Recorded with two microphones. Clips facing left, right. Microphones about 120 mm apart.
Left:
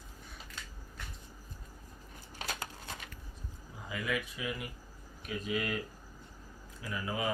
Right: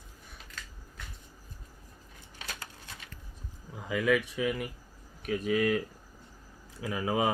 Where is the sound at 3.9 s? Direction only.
90° right; by 4.6 s 70° right (ahead or behind).